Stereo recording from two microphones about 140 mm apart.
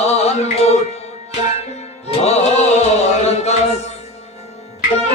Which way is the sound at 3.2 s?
50° left (ahead or behind).